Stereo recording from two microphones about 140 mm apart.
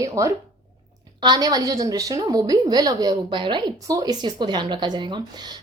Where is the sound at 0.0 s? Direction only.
20° right (ahead or behind).